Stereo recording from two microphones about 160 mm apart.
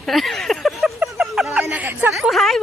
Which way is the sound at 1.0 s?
5° right (ahead or behind).